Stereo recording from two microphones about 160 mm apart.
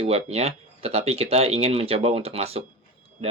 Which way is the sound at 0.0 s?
40° right (ahead or behind).